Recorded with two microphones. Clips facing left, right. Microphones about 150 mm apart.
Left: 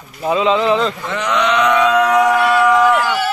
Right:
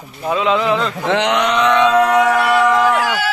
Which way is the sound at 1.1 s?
80° right.